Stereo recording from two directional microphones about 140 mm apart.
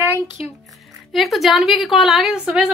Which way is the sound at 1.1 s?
Centre (ahead or behind).